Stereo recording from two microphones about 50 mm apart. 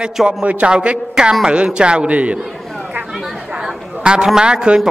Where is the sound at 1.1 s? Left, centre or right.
Centre.